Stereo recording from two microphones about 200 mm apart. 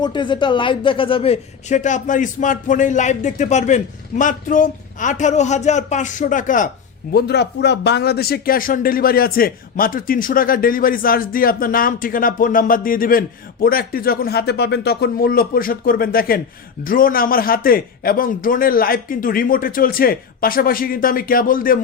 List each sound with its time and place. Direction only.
0.0 s a man's voice: 25° left (ahead or behind); by 6.7 s 40° left (ahead or behind)
7.1 s speech: 55° left (ahead or behind)